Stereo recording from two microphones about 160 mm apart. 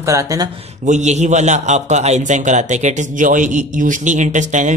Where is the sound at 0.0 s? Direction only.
20° right (ahead or behind).